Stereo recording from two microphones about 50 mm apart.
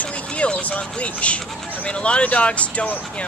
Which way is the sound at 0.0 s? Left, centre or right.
Left.